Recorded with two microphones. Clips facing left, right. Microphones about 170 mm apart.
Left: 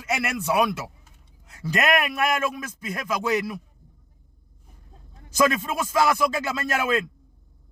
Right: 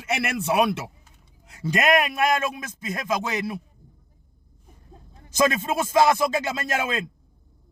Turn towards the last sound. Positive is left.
turn(degrees=-20)  # may be behind; listen again after turning